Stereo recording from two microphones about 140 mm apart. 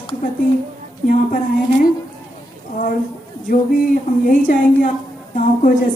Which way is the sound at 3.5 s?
75° left (ahead or behind).